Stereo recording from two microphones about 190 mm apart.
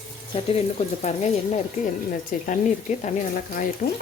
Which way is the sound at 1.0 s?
35° left (ahead or behind).